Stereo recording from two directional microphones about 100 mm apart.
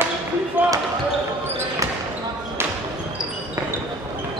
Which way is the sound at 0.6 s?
20° right (ahead or behind).